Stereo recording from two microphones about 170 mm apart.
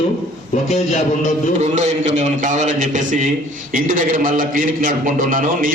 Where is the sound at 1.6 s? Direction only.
40° right (ahead or behind).